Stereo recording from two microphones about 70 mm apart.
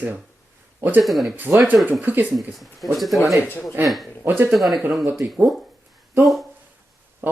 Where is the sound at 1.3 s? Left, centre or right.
Right.